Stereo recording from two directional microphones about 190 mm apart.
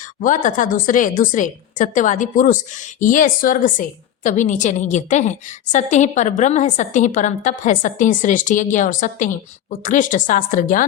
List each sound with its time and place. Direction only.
0.2 s a woman's voice: 40° left (ahead or behind)